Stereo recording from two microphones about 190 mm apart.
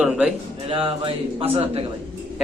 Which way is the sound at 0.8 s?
30° right (ahead or behind).